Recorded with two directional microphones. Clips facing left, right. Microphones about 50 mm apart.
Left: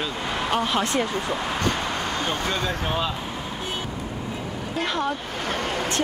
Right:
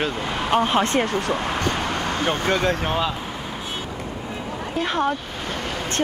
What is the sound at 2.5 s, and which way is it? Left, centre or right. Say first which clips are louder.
Speech: right 5 dB; right.